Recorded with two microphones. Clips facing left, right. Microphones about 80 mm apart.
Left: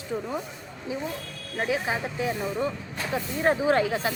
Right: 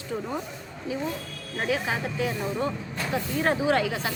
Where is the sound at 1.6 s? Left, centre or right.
Left.